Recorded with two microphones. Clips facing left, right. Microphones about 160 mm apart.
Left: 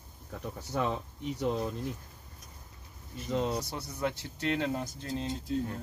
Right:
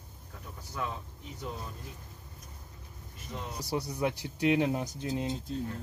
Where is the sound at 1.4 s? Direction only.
75° left (ahead or behind).